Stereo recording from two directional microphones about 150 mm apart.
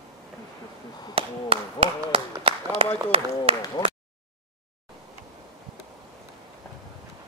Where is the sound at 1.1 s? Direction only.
40° right (ahead or behind).